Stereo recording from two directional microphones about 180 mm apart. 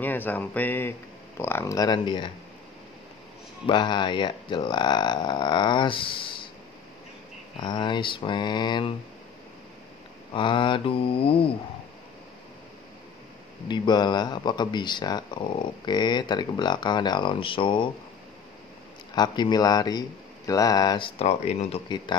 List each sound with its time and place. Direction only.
0.0 s speech: 10° left (ahead or behind)
3.6 s speech: 25° left (ahead or behind)
7.6 s speech: 25° left (ahead or behind)
10.3 s mantra: 25° left (ahead or behind)
13.7 s speech: 25° left (ahead or behind)
19.1 s speech: 25° left (ahead or behind)
21.2 s mantra: 35° left (ahead or behind)